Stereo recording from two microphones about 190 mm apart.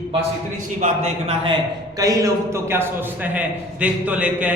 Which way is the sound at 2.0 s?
15° right (ahead or behind).